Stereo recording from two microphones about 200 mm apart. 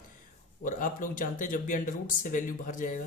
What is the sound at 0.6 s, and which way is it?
Speech, 40° left (ahead or behind).